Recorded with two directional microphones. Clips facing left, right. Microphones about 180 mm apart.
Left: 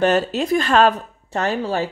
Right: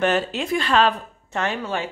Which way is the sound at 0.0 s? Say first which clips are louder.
Left 4 dB; 40° left (ahead or behind).